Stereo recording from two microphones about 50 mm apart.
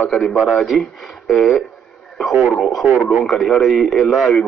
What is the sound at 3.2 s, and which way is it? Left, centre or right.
A man's voice, centre.